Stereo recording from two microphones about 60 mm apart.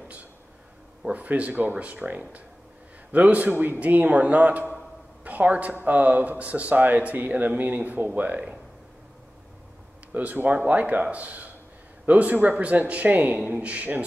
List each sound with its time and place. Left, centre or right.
1.0 s speech: right
10.1 s speech: right